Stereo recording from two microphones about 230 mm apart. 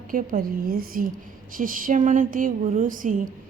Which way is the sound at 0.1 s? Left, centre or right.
Right.